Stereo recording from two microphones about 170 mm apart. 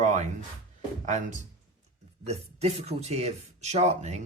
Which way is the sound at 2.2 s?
40° right (ahead or behind).